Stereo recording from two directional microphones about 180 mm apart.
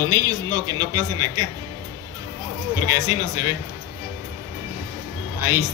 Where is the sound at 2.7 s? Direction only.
15° right (ahead or behind).